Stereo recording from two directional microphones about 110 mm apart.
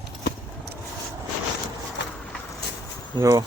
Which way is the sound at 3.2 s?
35° right (ahead or behind).